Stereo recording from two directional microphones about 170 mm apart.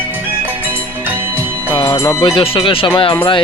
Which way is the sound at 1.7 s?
15° left (ahead or behind).